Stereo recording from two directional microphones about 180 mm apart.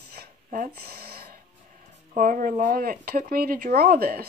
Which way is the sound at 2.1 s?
50° right (ahead or behind).